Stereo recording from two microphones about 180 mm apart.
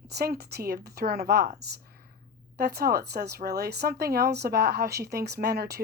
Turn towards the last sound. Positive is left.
turn(degrees=-60)  # may be behind; listen again after turning